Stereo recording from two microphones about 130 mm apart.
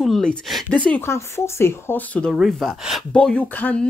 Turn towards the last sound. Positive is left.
turn(degrees=10)  # may be behind; listen again after turning